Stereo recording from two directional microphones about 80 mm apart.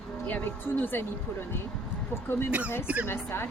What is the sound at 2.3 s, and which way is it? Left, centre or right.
Speech, left.